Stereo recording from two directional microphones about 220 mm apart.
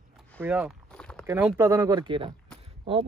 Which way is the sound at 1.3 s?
10° right (ahead or behind).